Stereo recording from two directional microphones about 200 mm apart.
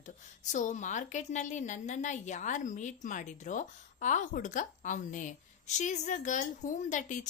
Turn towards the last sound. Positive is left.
turn(degrees=40)  # may be behind; listen again after turning